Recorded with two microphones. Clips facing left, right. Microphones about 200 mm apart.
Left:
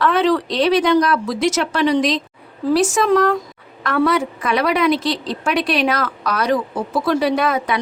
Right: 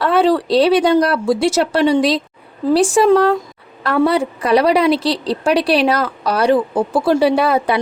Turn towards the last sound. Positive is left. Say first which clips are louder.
# right 4 dB
turn(degrees=-30)  # may be behind; listen again after turning